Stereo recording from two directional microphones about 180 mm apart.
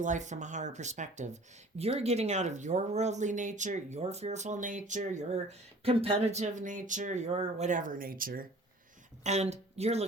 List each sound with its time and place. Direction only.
0.0 s speech: 45° right (ahead or behind)
9.2 s speech: 40° right (ahead or behind)